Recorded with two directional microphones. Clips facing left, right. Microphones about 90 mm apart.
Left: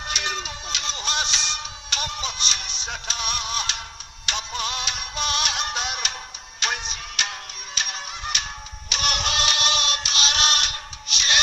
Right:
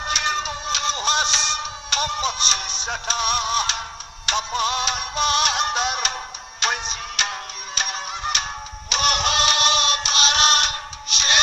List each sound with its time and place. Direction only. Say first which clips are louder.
0.0 s music: right 5 dB; 35° right (ahead or behind)
8.9 s synthetic singing: right 5 dB; 35° right (ahead or behind)